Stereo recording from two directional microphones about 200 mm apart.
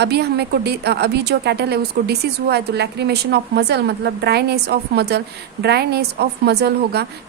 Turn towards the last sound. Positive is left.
turn(degrees=-55)  # may be behind; listen again after turning